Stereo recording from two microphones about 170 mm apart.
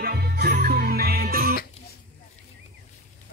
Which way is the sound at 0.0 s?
70° right (ahead or behind).